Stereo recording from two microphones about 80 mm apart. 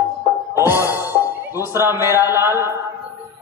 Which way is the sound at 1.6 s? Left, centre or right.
Right.